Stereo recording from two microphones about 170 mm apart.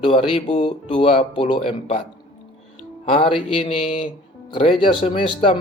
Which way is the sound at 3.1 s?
35° left (ahead or behind).